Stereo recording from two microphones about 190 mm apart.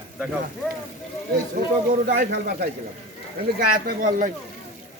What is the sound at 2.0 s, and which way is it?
Speech, 50° right (ahead or behind).